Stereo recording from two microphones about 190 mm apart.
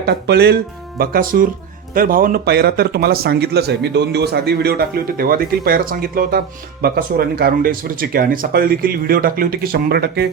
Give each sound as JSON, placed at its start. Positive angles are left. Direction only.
{"t": 0.0, "sound": "speech", "side_deg": -60}